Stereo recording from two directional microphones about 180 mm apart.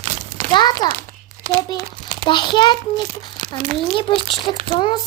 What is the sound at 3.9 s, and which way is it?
A child's voice, 30° left (ahead or behind).